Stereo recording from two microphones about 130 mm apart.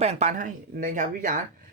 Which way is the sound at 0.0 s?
60° right (ahead or behind).